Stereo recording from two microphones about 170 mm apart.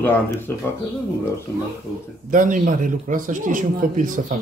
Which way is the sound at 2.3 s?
50° right (ahead or behind).